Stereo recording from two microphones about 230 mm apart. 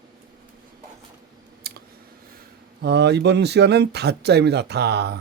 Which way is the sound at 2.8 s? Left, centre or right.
Right.